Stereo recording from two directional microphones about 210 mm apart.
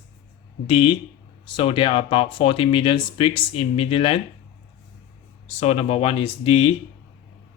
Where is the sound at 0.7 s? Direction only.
25° left (ahead or behind).